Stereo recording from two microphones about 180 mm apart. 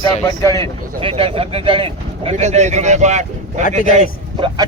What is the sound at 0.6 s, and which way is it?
Speech, 30° right (ahead or behind).